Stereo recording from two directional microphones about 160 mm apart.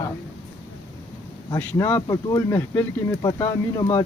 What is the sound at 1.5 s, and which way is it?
Speech, 15° left (ahead or behind).